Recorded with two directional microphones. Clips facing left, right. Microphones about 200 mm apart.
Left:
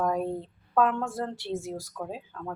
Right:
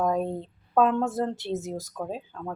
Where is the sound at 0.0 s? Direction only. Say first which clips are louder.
Right 2 dB; 20° right (ahead or behind).